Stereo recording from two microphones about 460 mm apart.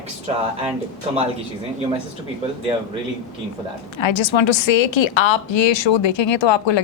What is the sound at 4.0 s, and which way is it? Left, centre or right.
A woman's voice, left.